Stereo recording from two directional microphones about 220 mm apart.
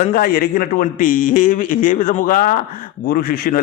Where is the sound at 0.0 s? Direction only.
40° left (ahead or behind).